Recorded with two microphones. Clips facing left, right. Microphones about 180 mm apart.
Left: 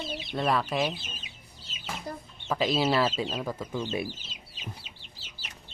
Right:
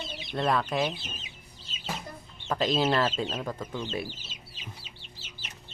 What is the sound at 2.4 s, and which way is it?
Speech, 5° left (ahead or behind).